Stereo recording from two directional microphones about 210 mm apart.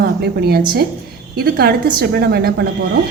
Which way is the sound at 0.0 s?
50° right (ahead or behind).